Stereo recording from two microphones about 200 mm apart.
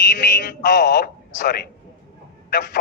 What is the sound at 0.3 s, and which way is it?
Music, 55° left (ahead or behind).